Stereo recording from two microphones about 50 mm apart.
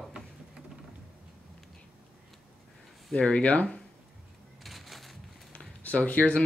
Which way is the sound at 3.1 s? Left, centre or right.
Centre.